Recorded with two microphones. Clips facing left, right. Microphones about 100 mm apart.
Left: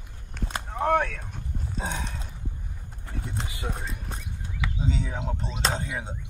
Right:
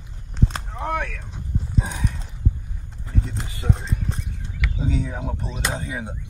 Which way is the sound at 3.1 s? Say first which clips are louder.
Right 5 dB; 15° left (ahead or behind).